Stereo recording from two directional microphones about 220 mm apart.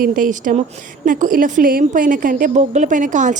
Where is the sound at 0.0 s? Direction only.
40° right (ahead or behind).